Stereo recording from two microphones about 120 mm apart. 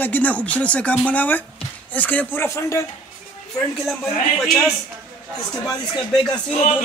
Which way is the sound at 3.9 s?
5° left (ahead or behind).